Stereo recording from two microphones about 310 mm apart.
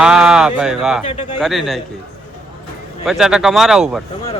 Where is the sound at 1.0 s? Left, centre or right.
Centre.